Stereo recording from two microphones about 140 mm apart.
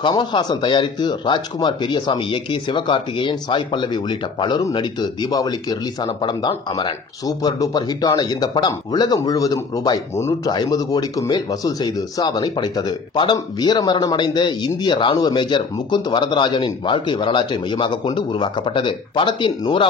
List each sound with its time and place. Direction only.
0.0 s speech: 30° left (ahead or behind)